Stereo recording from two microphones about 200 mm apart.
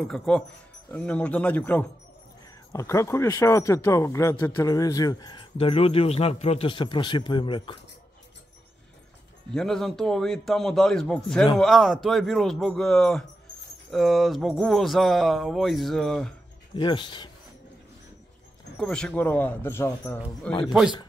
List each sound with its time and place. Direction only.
0.1 s a man's voice: centre (ahead or behind); by 7.8 s 25° left (ahead or behind)
9.5 s speech: 5° left (ahead or behind)
16.7 s speech: 25° left (ahead or behind)
18.8 s a man's voice: 5° left (ahead or behind)
20.6 s speech: centre (ahead or behind)